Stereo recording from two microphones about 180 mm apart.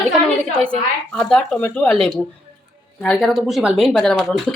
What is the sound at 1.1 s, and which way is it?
Speech, 5° left (ahead or behind).